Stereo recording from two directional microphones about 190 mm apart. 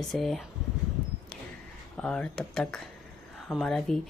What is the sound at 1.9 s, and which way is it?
A woman's voice, 5° left (ahead or behind).